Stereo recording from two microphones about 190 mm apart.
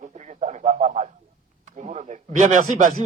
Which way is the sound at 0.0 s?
40° right (ahead or behind).